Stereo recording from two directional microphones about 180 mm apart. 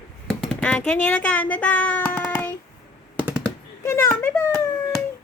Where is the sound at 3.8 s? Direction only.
15° left (ahead or behind).